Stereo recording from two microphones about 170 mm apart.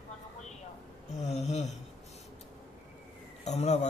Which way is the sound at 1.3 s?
40° left (ahead or behind).